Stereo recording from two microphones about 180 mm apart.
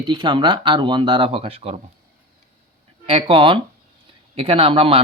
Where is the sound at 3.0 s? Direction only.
30° right (ahead or behind).